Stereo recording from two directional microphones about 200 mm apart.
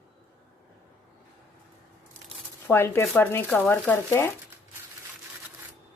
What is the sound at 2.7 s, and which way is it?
Speech, 10° left (ahead or behind).